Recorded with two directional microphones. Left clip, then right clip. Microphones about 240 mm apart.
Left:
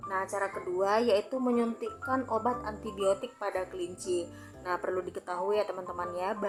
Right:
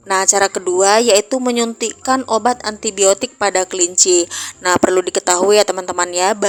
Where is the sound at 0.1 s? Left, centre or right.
Right.